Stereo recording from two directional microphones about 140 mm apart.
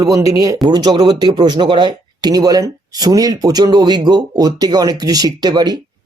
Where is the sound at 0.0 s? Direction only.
25° right (ahead or behind).